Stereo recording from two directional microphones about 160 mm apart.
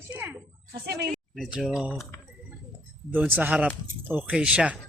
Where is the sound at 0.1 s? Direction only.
10° right (ahead or behind).